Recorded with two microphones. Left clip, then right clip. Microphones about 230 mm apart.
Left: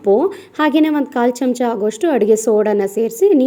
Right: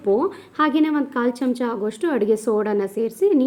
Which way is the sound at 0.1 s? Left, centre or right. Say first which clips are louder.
Left 6 dB; centre.